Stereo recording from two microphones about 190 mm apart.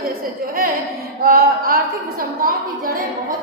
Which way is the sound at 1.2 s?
50° right (ahead or behind).